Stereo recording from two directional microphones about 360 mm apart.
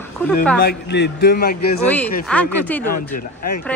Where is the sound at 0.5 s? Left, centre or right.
Left.